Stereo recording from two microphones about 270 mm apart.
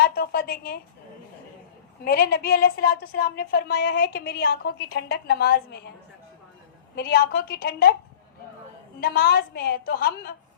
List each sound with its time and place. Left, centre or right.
0.0 s a woman's voice: left
2.0 s a woman's voice: left
6.9 s a woman's voice: left
9.0 s a woman's voice: left